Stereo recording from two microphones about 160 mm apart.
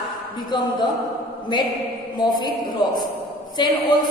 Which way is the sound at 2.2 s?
25° left (ahead or behind).